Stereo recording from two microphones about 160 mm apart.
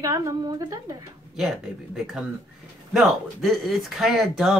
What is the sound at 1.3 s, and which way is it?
Speech, centre (ahead or behind).